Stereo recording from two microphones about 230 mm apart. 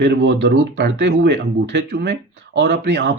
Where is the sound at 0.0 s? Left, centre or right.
Right.